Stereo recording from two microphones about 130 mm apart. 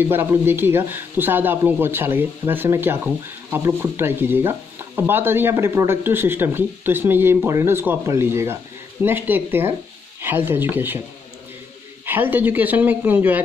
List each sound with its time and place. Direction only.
0.0 s speech: 15° right (ahead or behind)
12.1 s speech: 15° right (ahead or behind)